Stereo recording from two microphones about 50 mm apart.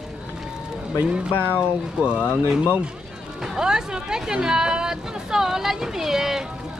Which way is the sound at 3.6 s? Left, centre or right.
Centre.